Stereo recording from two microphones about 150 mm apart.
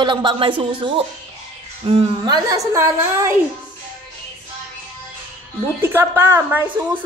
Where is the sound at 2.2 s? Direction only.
25° right (ahead or behind).